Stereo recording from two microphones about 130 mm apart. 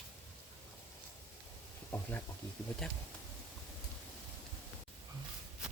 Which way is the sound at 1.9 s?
15° left (ahead or behind).